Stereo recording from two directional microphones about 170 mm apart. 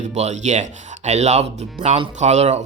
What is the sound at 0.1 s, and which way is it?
Speech, 40° right (ahead or behind).